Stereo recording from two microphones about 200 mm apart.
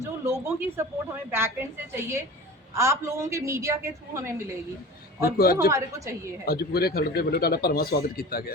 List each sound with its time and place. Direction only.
0.0 s a woman's voice: 10° right (ahead or behind)
5.4 s speech: 50° left (ahead or behind)